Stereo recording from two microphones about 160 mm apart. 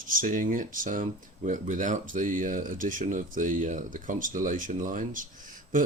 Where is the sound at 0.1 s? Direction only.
55° right (ahead or behind).